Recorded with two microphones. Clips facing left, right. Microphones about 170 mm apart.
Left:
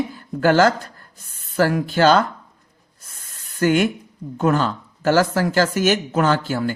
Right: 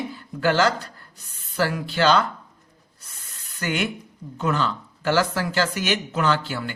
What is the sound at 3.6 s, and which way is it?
Speech, 45° left (ahead or behind).